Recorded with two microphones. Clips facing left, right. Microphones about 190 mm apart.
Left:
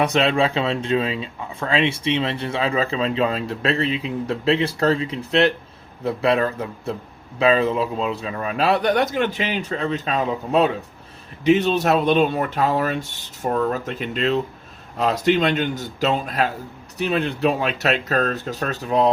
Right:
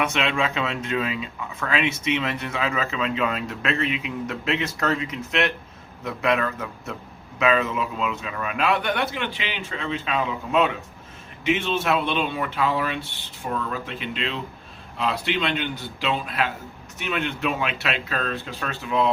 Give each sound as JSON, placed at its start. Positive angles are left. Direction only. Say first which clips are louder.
{"t": 0.0, "sound": "speech", "louder": "left 6 dB", "side_deg": 35}